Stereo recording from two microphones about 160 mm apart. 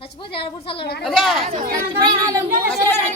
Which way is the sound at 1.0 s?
Centre (ahead or behind).